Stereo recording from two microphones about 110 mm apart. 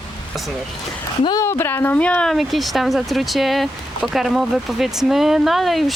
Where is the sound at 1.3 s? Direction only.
25° left (ahead or behind).